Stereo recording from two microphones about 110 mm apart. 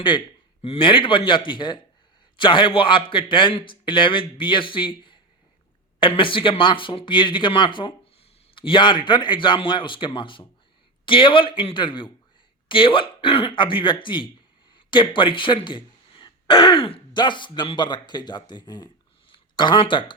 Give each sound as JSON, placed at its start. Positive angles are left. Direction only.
{"t": 0.6, "sound": "a man's voice", "side_deg": 55}